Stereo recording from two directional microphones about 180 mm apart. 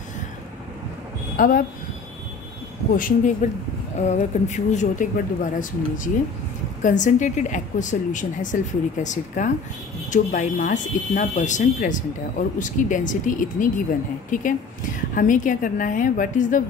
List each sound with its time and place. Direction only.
1.3 s speech: 55° left (ahead or behind)
2.9 s speech: 50° left (ahead or behind)